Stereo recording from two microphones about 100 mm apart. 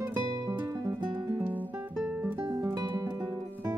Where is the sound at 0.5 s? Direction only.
35° right (ahead or behind).